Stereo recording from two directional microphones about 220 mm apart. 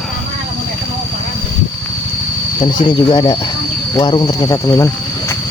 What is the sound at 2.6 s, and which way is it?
Speech, 20° left (ahead or behind).